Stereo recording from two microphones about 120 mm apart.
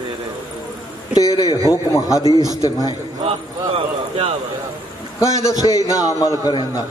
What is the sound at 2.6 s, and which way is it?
Speech, 30° left (ahead or behind).